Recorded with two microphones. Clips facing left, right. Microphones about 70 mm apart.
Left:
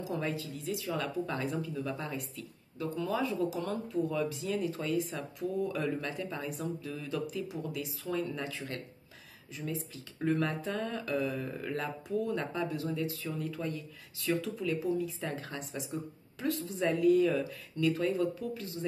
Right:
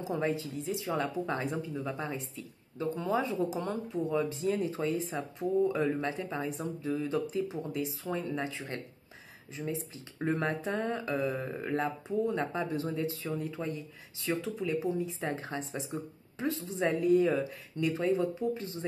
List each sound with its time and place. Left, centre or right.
0.0 s speech: right